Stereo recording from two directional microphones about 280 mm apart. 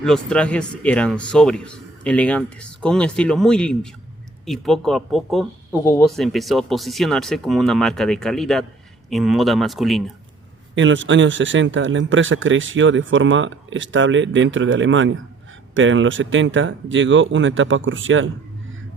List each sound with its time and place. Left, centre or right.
0.3 s speech: centre
10.8 s speech: right